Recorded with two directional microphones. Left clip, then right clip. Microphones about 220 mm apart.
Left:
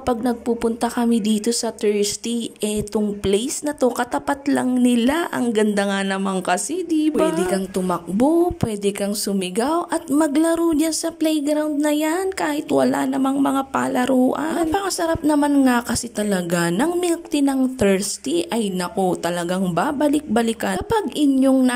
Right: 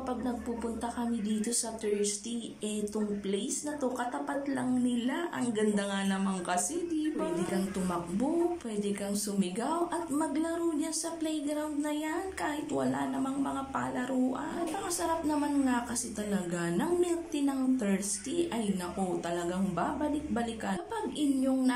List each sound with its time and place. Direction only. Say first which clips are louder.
0.0 s speech: left 14 dB; 45° left (ahead or behind)
9.4 s speech: left 11 dB; 45° left (ahead or behind)